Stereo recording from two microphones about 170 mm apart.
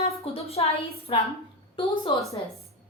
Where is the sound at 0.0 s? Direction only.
35° left (ahead or behind).